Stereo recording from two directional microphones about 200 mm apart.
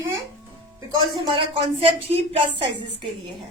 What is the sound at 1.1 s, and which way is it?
Speech, 25° right (ahead or behind).